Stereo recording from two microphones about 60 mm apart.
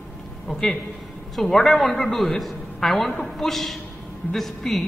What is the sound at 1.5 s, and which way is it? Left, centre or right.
A man's voice, centre.